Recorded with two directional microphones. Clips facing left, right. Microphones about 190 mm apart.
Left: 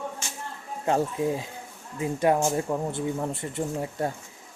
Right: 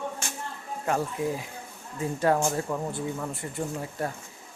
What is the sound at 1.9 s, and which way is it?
Speech, 15° left (ahead or behind).